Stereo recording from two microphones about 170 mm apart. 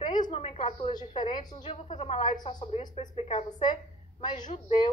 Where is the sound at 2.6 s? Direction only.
35° left (ahead or behind).